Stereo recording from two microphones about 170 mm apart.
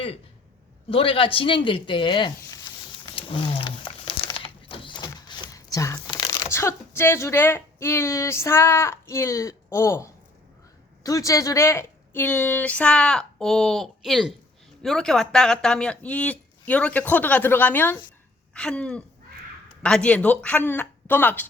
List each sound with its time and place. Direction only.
0.9 s speech: 30° left (ahead or behind)
3.1 s roaring cats: 30° left (ahead or behind)
4.3 s a sound: 30° left (ahead or behind)
5.5 s a woman's voice: 20° left (ahead or behind)